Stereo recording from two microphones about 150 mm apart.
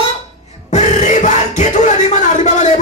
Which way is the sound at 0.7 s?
55° left (ahead or behind).